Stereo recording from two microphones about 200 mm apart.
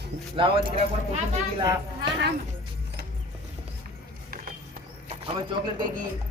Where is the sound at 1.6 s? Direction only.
15° right (ahead or behind).